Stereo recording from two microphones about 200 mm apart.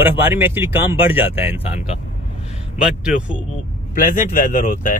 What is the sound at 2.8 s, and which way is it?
Speech, 5° right (ahead or behind).